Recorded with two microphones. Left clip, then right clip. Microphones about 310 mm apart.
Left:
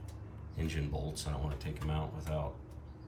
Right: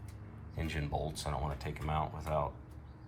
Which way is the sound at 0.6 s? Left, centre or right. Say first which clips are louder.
Right 3 dB; centre.